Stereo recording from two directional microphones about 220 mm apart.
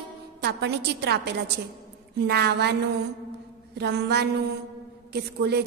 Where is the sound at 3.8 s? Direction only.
50° right (ahead or behind).